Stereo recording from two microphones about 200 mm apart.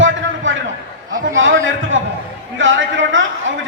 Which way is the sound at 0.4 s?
75° right (ahead or behind).